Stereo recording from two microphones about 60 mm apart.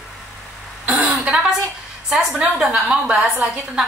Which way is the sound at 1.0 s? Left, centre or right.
Centre.